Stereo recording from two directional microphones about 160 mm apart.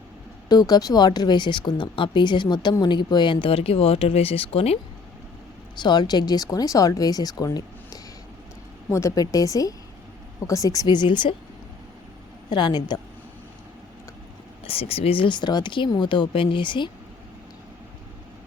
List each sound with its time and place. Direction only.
0.4 s speech: 25° left (ahead or behind)
5.7 s speech: 25° left (ahead or behind)
12.5 s speech: 25° left (ahead or behind)
14.6 s speech: 35° left (ahead or behind)